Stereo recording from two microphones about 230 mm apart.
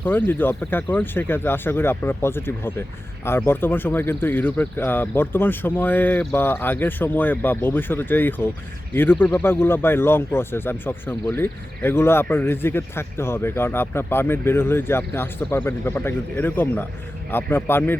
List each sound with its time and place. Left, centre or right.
0.0 s speech: centre